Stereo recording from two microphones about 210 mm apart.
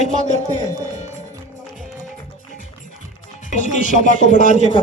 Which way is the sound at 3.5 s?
35° left (ahead or behind).